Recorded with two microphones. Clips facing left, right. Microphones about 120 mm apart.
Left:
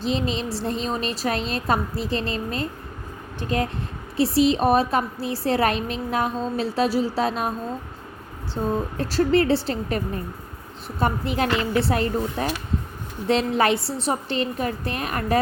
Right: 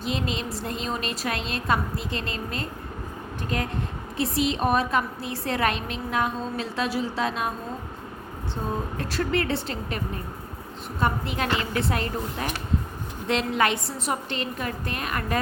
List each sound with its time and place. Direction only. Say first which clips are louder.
0.0 s a woman's voice: left 4 dB; 30° left (ahead or behind)
4.2 s a woman's voice: left 6 dB; 35° left (ahead or behind)
9.0 s a woman's voice: left 7 dB; 35° left (ahead or behind)
11.0 s a woman's voice: left 3 dB; 35° left (ahead or behind)